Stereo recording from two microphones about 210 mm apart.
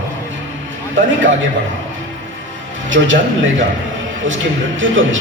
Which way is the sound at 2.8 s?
65° right (ahead or behind).